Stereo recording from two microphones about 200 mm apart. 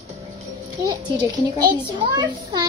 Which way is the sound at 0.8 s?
20° right (ahead or behind).